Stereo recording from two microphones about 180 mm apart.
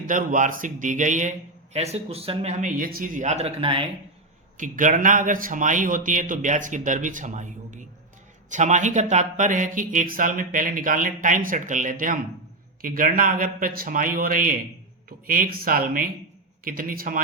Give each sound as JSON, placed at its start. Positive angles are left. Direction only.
{"t": 0.1, "sound": "a man's voice", "side_deg": -45}
{"t": 4.5, "sound": "a man's voice", "side_deg": -45}